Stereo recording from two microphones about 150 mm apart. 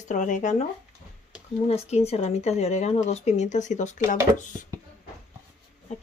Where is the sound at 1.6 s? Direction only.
45° left (ahead or behind).